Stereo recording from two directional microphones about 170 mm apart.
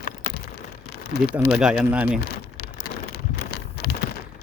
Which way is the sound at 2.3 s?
65° left (ahead or behind).